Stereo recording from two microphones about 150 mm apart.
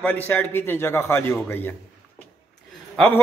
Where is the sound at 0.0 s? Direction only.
10° left (ahead or behind).